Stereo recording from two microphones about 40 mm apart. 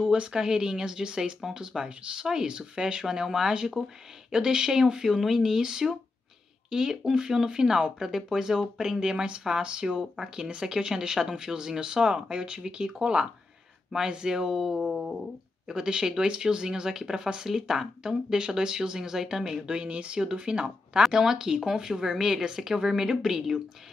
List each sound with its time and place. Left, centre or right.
0.1 s speech: centre
1.7 s speech: centre
14.5 s speech: centre
14.9 s dog: centre
15.7 s speech: centre
19.8 s speech: right
21.0 s speech: centre